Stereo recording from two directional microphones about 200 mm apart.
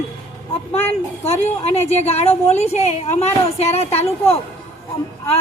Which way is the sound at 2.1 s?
35° left (ahead or behind).